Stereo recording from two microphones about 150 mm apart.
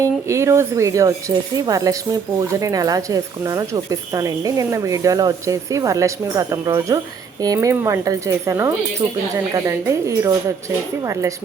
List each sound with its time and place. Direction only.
0.0 s speech: 20° right (ahead or behind)